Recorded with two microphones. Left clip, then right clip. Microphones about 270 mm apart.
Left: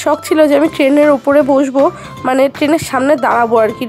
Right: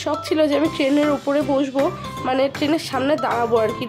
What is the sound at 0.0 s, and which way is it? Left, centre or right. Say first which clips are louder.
A woman's voice: left 9 dB; left.